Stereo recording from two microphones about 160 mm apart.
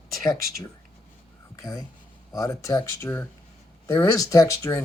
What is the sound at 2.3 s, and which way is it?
Speech, 20° left (ahead or behind).